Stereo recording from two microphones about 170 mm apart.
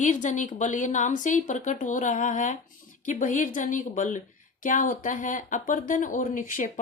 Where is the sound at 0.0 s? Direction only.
45° left (ahead or behind).